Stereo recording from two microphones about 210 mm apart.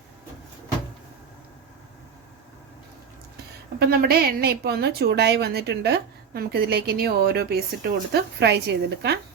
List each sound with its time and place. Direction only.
3.8 s a woman's voice: 50° right (ahead or behind)